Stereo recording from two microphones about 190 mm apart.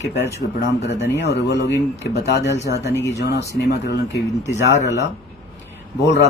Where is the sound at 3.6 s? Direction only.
60° left (ahead or behind).